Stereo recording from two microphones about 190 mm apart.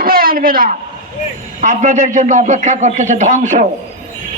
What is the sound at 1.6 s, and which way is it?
A man's voice, 40° right (ahead or behind).